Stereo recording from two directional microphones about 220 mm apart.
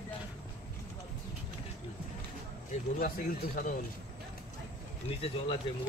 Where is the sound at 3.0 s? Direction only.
40° left (ahead or behind).